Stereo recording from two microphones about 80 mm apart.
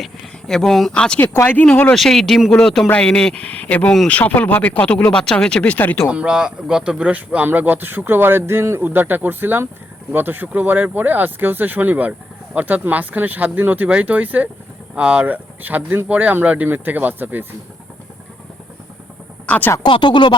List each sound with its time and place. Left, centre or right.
0.0 s speech: centre
0.9 s speech: centre
2.0 s speech: centre
5.7 s speech: left
6.1 s speech: centre
19.5 s speech: centre
19.8 s speech: left